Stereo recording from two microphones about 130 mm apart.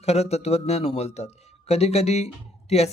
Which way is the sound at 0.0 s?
55° left (ahead or behind).